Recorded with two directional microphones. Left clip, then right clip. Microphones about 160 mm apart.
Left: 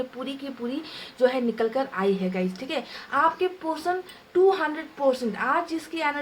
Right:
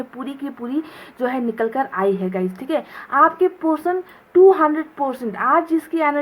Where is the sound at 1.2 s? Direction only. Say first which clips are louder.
Right 1 dB; 40° right (ahead or behind).